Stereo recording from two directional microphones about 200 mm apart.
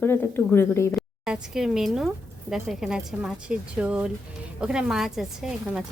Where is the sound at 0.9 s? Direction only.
5° right (ahead or behind).